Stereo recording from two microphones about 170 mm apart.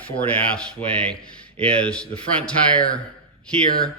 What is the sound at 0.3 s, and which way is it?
Speech, 5° left (ahead or behind).